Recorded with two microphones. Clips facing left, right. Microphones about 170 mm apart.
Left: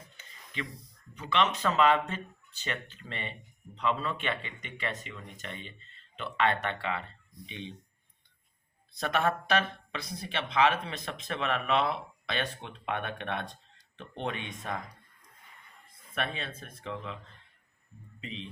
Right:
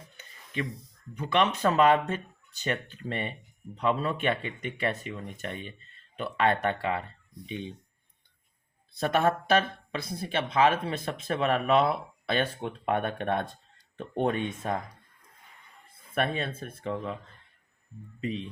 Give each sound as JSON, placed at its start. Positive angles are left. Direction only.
{"t": 0.5, "sound": "speech", "side_deg": -50}
{"t": 9.0, "sound": "speech", "side_deg": -40}
{"t": 16.1, "sound": "speech", "side_deg": -45}
{"t": 18.2, "sound": "speech", "side_deg": -45}